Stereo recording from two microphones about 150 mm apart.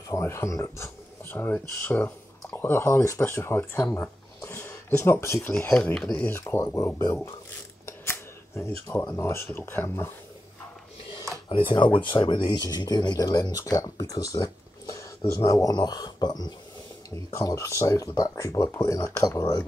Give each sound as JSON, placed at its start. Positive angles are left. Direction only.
{"t": 0.1, "sound": "speech", "side_deg": 20}
{"t": 7.8, "sound": "camera", "side_deg": 15}
{"t": 9.1, "sound": "speech", "side_deg": 15}
{"t": 12.0, "sound": "speech", "side_deg": 35}